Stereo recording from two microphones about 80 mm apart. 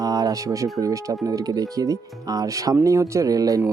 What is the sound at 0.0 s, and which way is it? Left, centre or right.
Speech, right.